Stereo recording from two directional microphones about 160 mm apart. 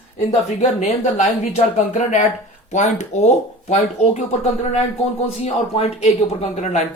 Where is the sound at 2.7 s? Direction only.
45° left (ahead or behind).